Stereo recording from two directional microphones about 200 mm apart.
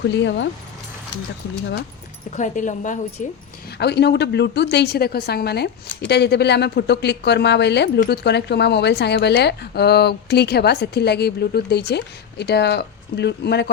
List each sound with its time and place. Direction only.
0.0 s a woman's voice: 60° left (ahead or behind)
2.3 s speech: 40° left (ahead or behind)
3.8 s a woman's voice: 55° left (ahead or behind)